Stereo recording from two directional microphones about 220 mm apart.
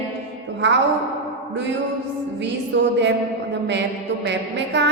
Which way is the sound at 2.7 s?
55° right (ahead or behind).